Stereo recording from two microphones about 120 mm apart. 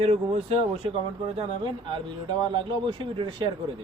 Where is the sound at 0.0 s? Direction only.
55° right (ahead or behind).